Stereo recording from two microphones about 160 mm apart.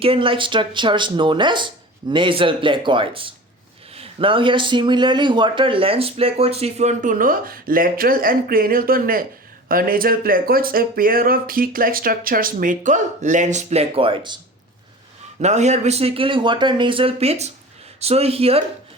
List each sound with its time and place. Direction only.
0.0 s a man's voice: 35° right (ahead or behind)
15.4 s a man's voice: 45° right (ahead or behind)